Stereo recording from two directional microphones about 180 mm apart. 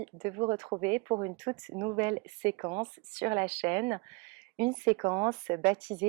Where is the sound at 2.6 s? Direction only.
30° right (ahead or behind).